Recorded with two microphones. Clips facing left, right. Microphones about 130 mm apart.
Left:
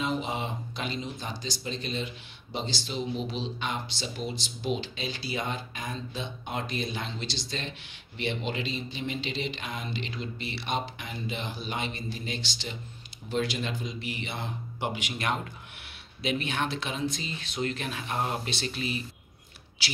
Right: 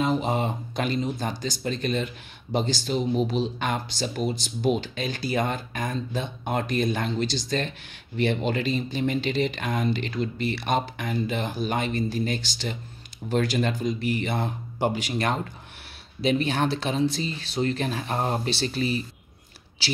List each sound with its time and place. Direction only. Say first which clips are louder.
0.0 s speech: right 6 dB; 45° right (ahead or behind)